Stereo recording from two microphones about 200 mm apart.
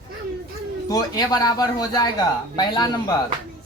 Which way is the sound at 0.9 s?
20° left (ahead or behind).